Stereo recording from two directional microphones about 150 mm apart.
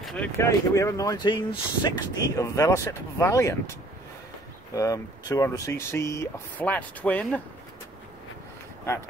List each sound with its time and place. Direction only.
0.0 s a sound: 5° left (ahead or behind)
0.4 s speech: 20° left (ahead or behind)
4.7 s speech: 20° left (ahead or behind)